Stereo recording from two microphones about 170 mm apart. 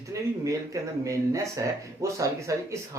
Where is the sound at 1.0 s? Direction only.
20° right (ahead or behind).